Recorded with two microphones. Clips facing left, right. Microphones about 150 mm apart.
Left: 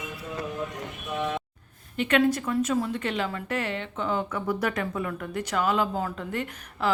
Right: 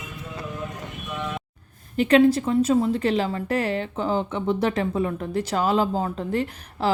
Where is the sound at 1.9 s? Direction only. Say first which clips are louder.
Right 6 dB; 35° right (ahead or behind).